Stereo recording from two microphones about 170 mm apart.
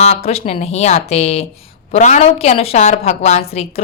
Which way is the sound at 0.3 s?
35° left (ahead or behind).